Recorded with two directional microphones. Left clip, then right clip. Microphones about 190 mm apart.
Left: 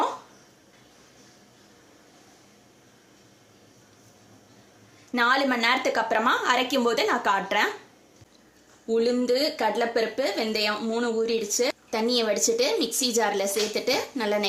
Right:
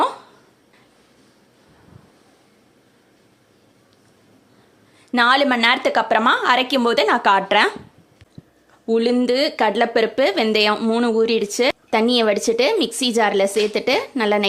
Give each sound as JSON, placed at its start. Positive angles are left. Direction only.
{"t": 5.1, "sound": "speech", "side_deg": -50}
{"t": 8.9, "sound": "speech", "side_deg": -50}